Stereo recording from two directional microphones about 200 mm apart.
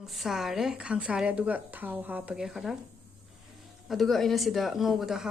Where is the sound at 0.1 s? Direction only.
Centre (ahead or behind).